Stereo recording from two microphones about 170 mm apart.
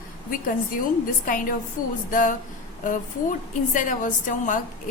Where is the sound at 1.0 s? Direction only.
55° left (ahead or behind).